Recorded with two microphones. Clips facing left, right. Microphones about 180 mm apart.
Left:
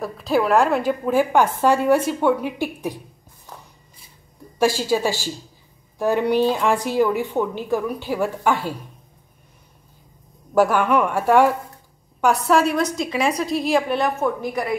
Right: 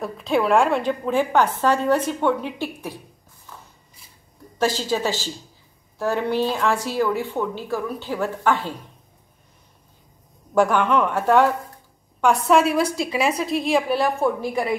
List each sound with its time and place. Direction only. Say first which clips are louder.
0.0 s a woman's voice: left 1 dB; centre (ahead or behind)
4.6 s a woman's voice: left 3 dB; 10° left (ahead or behind)
10.5 s a woman's voice: left 1 dB; 5° left (ahead or behind)
12.2 s a woman's voice: even; centre (ahead or behind)